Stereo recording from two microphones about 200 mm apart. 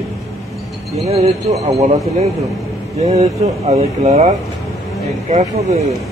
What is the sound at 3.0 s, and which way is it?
Speech, 30° right (ahead or behind).